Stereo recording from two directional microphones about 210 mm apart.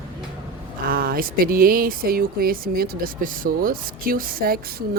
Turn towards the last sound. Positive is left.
turn(degrees=-45)  # may be behind; listen again after turning